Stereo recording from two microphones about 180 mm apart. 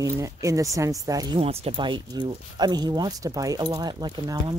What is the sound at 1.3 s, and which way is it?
Speech, 35° right (ahead or behind).